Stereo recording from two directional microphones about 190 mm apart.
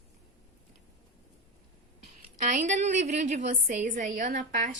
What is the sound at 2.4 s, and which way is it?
A woman's voice, 40° right (ahead or behind).